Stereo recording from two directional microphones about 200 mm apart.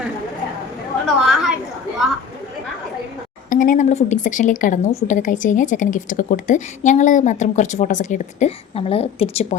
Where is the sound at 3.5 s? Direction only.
40° left (ahead or behind).